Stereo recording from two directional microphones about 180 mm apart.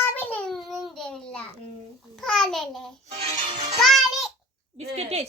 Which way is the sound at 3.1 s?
35° right (ahead or behind).